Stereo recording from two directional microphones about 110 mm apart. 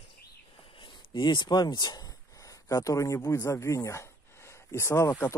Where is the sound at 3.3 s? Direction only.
25° left (ahead or behind).